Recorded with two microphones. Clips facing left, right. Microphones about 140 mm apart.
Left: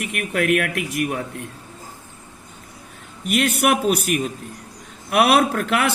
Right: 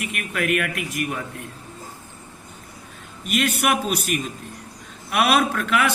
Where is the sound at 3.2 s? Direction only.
60° left (ahead or behind).